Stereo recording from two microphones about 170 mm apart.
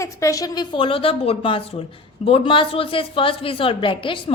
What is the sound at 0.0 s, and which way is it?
A woman's voice, 20° left (ahead or behind).